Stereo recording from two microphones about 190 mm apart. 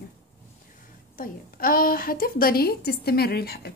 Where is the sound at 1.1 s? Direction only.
50° left (ahead or behind).